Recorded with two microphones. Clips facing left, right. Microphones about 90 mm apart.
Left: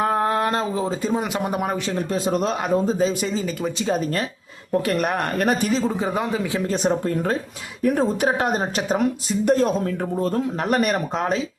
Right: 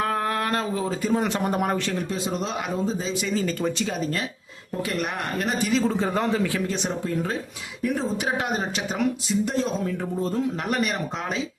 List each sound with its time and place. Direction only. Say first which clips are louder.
0.0 s a sound: left 5 dB; 25° left (ahead or behind)
1.2 s speech: even; 10° left (ahead or behind)
2.0 s a woman's voice: left 5 dB; 45° left (ahead or behind)
5.8 s speech: even; 15° left (ahead or behind)
6.7 s a woman's voice: left 6 dB; 45° left (ahead or behind)
10.2 s speech: left 4 dB; 65° left (ahead or behind)
10.7 s a woman's voice: left 5 dB; 50° left (ahead or behind)